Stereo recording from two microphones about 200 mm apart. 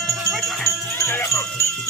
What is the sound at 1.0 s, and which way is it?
Music, 10° left (ahead or behind).